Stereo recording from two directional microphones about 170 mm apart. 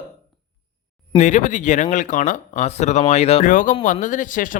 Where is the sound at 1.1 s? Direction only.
45° left (ahead or behind).